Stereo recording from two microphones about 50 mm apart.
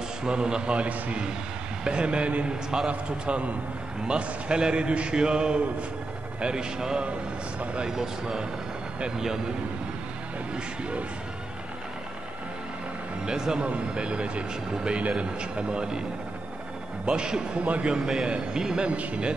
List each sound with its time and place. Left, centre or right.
0.2 s a man's voice: centre
10.5 s a man's voice: right
13.2 s a man's voice: centre
17.0 s a man's voice: centre